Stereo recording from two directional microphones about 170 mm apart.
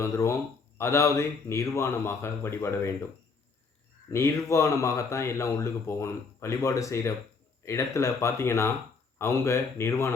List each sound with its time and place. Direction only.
0.0 s speech: 15° left (ahead or behind)
4.1 s speech: 15° left (ahead or behind)